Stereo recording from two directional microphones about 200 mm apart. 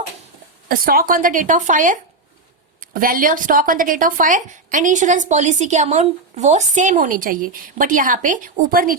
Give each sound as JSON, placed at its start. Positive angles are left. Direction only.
{"t": 0.7, "sound": "a woman's voice", "side_deg": -45}